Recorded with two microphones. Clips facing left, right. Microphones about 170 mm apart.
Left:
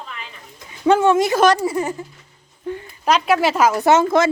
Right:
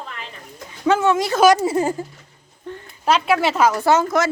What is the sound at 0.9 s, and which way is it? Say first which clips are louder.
Speech: left 3 dB; 10° left (ahead or behind).